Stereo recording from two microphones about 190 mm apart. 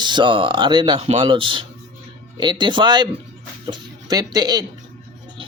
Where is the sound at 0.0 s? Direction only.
25° right (ahead or behind).